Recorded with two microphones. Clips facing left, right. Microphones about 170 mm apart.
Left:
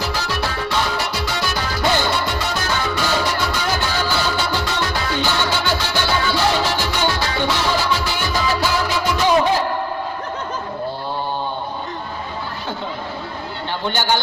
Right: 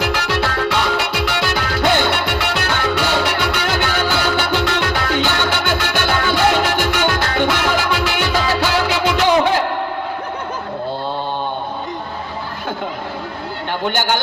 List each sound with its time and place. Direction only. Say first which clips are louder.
0.0 s music: right 4 dB; 75° right (ahead or behind); by 7.5 s 55° right (ahead or behind)
8.0 s music: right 3 dB; 70° right (ahead or behind)
13.8 s a sound: right 1 dB; 50° right (ahead or behind)